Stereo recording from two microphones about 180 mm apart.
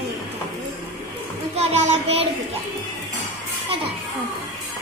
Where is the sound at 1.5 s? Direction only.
35° right (ahead or behind).